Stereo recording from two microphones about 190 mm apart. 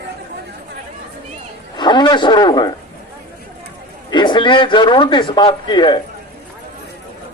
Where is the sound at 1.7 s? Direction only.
25° left (ahead or behind).